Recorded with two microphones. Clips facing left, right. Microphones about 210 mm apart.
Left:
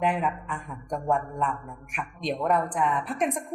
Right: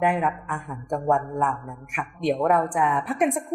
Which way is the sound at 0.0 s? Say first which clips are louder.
Right 3 dB; 65° right (ahead or behind).